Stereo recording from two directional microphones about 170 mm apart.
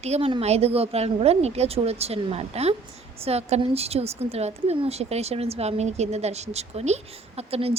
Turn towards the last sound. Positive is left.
turn(degrees=-35)  # may be behind; listen again after turning